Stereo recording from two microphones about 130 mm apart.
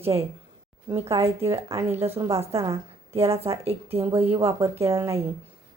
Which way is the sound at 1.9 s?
50° right (ahead or behind).